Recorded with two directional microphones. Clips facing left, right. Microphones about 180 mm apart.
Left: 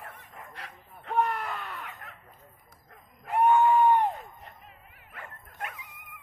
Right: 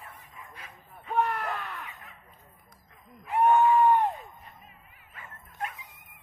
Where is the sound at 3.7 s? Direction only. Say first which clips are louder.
Even; centre (ahead or behind).